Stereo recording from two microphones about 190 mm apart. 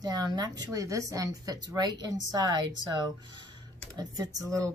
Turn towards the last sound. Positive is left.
turn(degrees=-20)  # may be behind; listen again after turning